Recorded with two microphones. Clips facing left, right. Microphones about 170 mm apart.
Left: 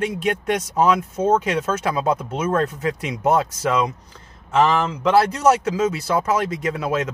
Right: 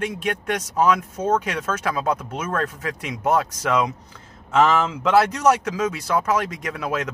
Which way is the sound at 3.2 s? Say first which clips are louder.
Left 2 dB; centre (ahead or behind).